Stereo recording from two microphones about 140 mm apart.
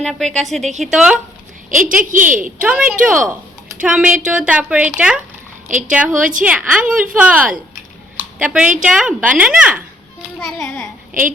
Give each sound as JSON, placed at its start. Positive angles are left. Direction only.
{"t": 0.0, "sound": "a woman's voice", "side_deg": 5}
{"t": 1.7, "sound": "a woman's voice", "side_deg": -70}
{"t": 2.4, "sound": "a woman's voice", "side_deg": -10}
{"t": 8.1, "sound": "a sound", "side_deg": -10}
{"t": 8.8, "sound": "a woman's voice", "side_deg": -5}
{"t": 10.4, "sound": "a woman's voice", "side_deg": 5}